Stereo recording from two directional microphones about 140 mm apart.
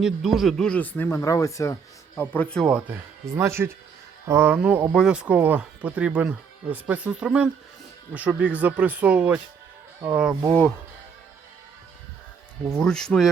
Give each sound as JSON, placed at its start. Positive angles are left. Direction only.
{"t": 0.0, "sound": "speech", "side_deg": 0}
{"t": 2.3, "sound": "speech", "side_deg": 10}
{"t": 2.6, "sound": "speech", "side_deg": -10}
{"t": 12.6, "sound": "speech", "side_deg": 5}